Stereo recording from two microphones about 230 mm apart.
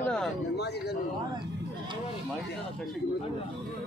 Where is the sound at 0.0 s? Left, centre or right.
Centre.